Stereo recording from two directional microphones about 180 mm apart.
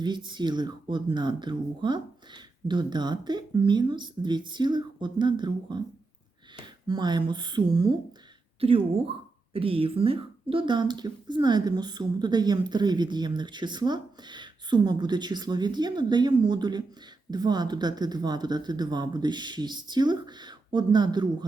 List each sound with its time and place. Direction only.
0.0 s speech: 25° right (ahead or behind)
6.8 s speech: 25° right (ahead or behind)
9.5 s speech: 30° right (ahead or behind)